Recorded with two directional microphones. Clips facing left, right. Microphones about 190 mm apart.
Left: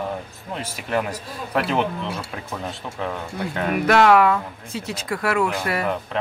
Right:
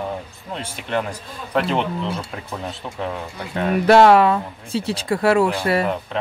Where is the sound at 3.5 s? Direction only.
30° right (ahead or behind).